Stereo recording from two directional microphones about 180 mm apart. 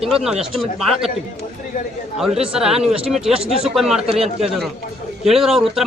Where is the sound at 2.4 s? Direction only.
5° right (ahead or behind).